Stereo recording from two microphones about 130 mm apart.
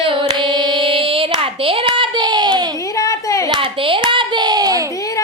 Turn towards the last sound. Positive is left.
turn(degrees=-30)  # may be behind; listen again after turning